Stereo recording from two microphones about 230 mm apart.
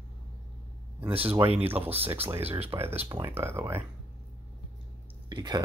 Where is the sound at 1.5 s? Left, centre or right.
Right.